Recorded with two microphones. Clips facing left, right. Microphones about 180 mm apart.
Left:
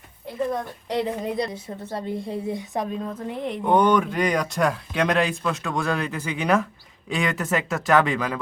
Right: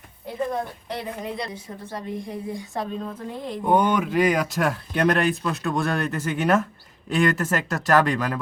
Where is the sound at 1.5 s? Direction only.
25° left (ahead or behind).